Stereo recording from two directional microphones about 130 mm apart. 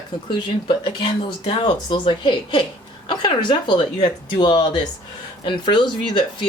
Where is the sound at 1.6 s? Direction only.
35° left (ahead or behind).